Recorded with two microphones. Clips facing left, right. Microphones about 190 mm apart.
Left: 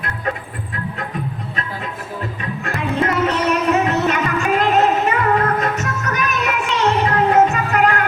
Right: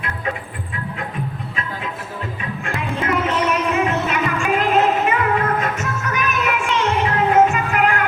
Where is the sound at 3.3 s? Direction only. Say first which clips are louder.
Left 2 dB; 40° left (ahead or behind).